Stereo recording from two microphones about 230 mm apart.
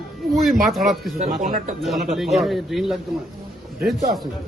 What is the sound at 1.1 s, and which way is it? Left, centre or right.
Speech, right.